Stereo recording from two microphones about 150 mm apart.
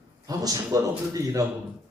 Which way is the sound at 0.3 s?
25° right (ahead or behind).